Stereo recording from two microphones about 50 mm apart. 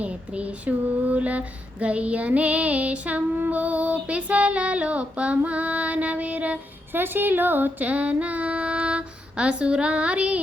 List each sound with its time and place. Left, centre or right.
0.0 s female singing: right
6.9 s a woman's voice: right
7.9 s female singing: right